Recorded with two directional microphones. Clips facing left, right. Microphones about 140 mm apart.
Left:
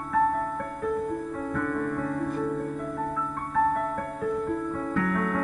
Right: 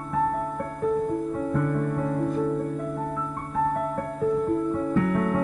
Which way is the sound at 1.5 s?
25° right (ahead or behind).